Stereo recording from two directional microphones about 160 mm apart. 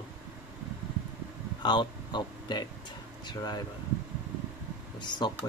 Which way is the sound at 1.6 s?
30° left (ahead or behind).